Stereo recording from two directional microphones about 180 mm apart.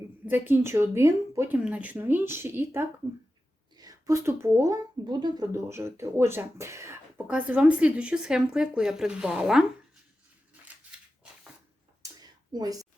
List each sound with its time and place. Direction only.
0.3 s speech: 10° right (ahead or behind)
10.9 s scissors: 5° right (ahead or behind)
12.0 s a sound: 20° right (ahead or behind)